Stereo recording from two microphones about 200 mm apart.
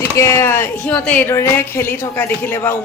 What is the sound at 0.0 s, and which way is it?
Speech, 15° left (ahead or behind).